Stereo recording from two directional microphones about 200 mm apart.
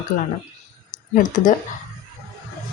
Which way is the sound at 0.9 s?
40° left (ahead or behind).